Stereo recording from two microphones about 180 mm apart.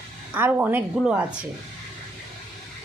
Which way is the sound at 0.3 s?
10° right (ahead or behind).